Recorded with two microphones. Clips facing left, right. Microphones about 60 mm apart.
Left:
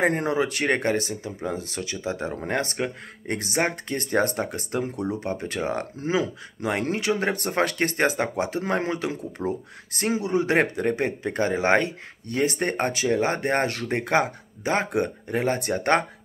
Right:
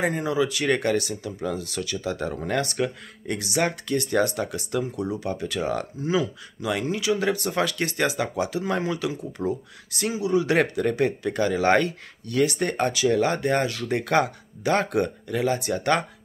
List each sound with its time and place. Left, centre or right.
0.0 s speech: left
15.2 s speech: left